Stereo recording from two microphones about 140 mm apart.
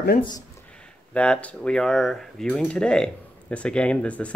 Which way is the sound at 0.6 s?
10° left (ahead or behind).